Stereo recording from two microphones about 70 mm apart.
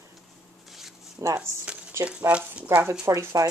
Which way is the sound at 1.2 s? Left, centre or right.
Right.